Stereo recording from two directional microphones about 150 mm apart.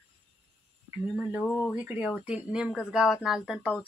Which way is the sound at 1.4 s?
5° left (ahead or behind).